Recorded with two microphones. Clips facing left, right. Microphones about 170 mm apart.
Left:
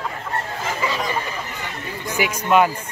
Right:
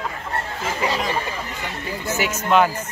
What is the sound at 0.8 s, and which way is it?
Speech, 60° right (ahead or behind).